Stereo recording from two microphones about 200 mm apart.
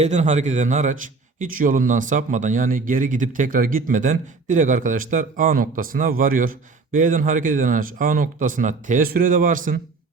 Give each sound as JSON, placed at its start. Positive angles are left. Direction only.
{"t": 0.0, "sound": "speech", "side_deg": -35}